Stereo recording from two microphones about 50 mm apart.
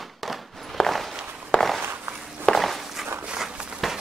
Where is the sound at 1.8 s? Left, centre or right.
Right.